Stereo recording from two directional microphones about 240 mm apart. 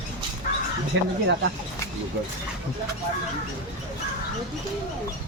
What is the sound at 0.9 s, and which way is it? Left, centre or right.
Speech, right.